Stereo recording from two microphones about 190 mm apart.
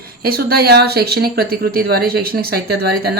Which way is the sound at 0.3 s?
50° right (ahead or behind).